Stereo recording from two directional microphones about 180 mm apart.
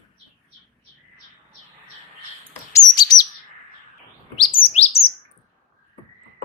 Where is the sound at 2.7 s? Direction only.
20° left (ahead or behind).